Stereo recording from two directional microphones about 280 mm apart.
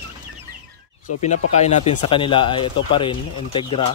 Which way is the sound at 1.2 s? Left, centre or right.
Left.